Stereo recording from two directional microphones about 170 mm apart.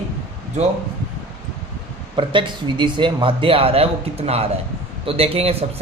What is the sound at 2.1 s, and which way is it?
Speech, 30° right (ahead or behind).